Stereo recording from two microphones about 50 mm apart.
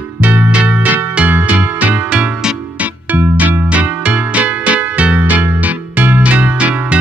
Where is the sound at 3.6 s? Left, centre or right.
Right.